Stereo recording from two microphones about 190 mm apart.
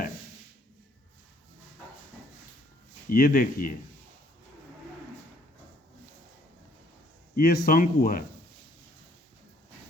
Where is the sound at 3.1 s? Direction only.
50° left (ahead or behind).